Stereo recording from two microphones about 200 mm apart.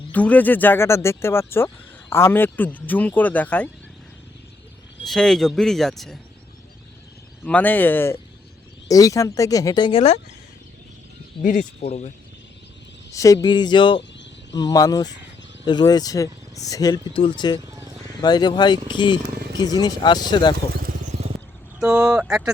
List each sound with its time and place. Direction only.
0.1 s speech: 5° left (ahead or behind)
5.0 s speech: centre (ahead or behind)
7.4 s speech: 10° left (ahead or behind); by 10.2 s 30° left (ahead or behind)
11.4 s speech: 35° left (ahead or behind)
13.1 s speech: 15° left (ahead or behind)
20.7 s vehicle: 45° right (ahead or behind)
21.8 s speech: 5° right (ahead or behind)